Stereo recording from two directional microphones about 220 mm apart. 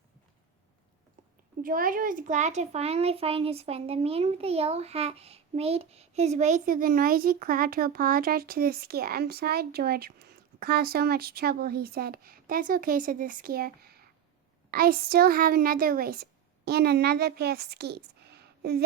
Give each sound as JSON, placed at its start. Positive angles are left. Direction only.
{"t": 1.6, "sound": "a child's voice", "side_deg": -40}